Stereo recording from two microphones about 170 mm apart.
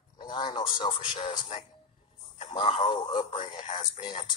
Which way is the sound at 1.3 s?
45° left (ahead or behind).